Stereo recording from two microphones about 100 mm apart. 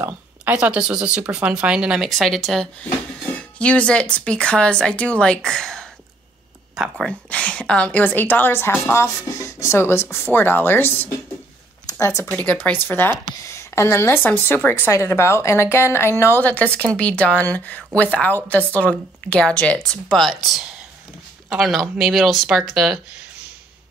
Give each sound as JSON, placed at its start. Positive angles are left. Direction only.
{"t": 0.0, "sound": "speech", "side_deg": -15}
{"t": 2.0, "sound": "a woman's voice", "side_deg": 5}
{"t": 7.1, "sound": "a woman's voice", "side_deg": 10}
{"t": 12.4, "sound": "a woman's voice", "side_deg": 15}